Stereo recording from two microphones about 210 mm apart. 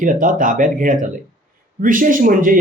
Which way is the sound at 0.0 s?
40° right (ahead or behind).